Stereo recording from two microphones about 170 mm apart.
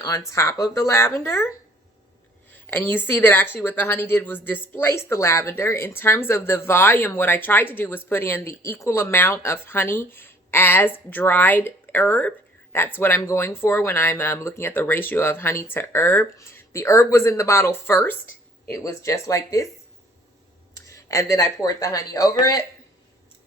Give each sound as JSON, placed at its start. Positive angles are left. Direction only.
{"t": 0.3, "sound": "speech", "side_deg": 20}
{"t": 20.8, "sound": "speech", "side_deg": 20}